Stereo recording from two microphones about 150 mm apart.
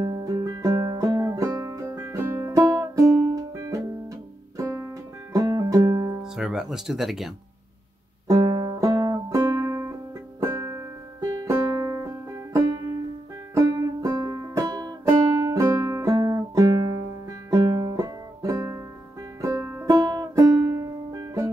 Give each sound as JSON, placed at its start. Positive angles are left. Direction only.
{"t": 0.0, "sound": "music", "side_deg": -25}
{"t": 6.2, "sound": "speech", "side_deg": -5}
{"t": 8.3, "sound": "music", "side_deg": -30}